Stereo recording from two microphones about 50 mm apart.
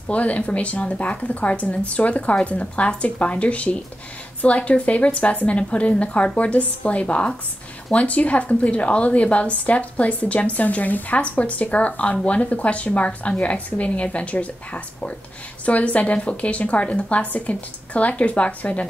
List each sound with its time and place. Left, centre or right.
0.1 s a woman's voice: left